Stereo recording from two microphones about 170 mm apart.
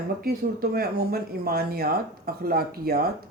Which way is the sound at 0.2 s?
65° right (ahead or behind).